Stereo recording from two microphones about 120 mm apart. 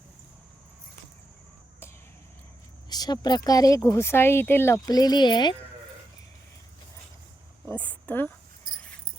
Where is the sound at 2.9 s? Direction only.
35° left (ahead or behind).